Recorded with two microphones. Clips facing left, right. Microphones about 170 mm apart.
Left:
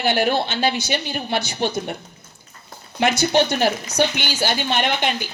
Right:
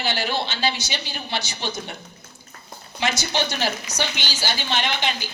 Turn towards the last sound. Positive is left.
turn(degrees=55)  # may be behind; listen again after turning